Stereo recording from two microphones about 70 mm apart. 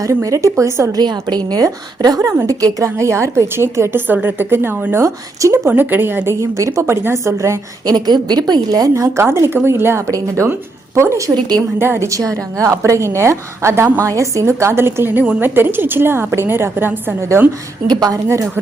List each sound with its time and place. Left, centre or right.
0.0 s a woman's voice: right
0.9 s a woman's voice: right
1.6 s a woman's voice: right
4.0 s a woman's voice: right
5.0 s a woman's voice: right
5.6 s speech: right
6.4 s a woman's voice: right
7.9 s a woman's voice: right
9.1 s a woman's voice: right
15.1 s a woman's voice: centre
15.4 s a woman's voice: right
17.8 s a woman's voice: right